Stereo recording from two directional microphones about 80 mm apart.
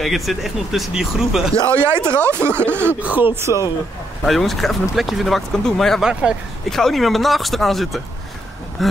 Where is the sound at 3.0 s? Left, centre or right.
Right.